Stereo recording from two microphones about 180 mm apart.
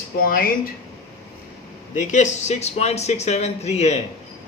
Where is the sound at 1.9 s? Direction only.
40° left (ahead or behind).